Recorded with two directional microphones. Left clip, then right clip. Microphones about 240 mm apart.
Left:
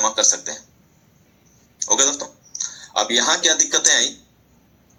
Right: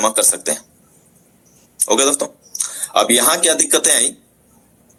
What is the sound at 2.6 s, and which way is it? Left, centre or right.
Speech, right.